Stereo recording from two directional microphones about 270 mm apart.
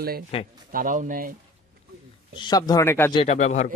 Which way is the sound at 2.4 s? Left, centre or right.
Centre.